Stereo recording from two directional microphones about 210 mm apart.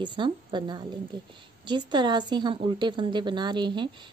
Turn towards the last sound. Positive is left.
turn(degrees=-20)  # may be behind; listen again after turning